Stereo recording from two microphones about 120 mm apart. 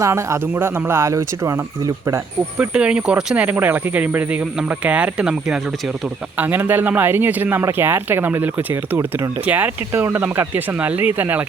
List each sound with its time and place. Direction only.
0.0 s speech: 25° right (ahead or behind)
2.6 s speech: 10° right (ahead or behind)